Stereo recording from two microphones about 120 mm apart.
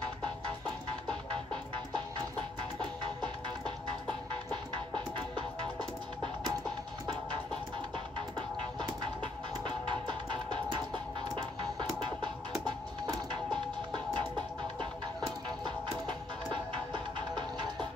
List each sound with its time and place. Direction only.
8.4 s music: 40° right (ahead or behind)
13.0 s music: 40° right (ahead or behind)
15.6 s music: 40° right (ahead or behind)